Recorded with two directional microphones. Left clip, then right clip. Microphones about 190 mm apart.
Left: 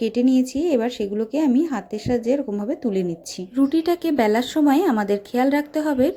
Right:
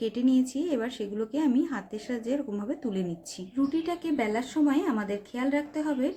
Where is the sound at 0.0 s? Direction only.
35° left (ahead or behind).